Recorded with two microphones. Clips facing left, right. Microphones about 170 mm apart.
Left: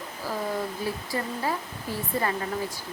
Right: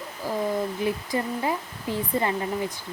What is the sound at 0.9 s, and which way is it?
Speech, 20° right (ahead or behind).